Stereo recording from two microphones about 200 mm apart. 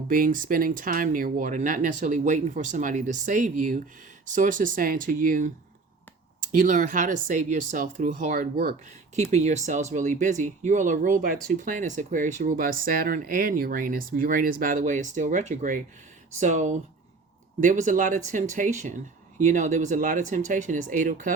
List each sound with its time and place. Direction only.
0.1 s speech: 45° right (ahead or behind)
9.3 s speech: 35° right (ahead or behind)